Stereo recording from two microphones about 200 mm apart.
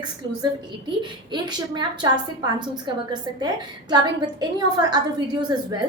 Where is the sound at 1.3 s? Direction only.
20° right (ahead or behind).